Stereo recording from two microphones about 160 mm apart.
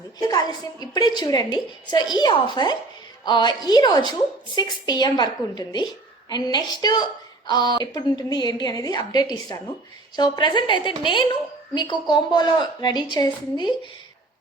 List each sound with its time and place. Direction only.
0.2 s a woman's voice: 25° left (ahead or behind)